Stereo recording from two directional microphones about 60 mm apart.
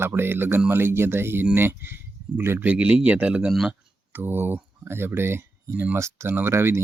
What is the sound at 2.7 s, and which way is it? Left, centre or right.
Speech, centre.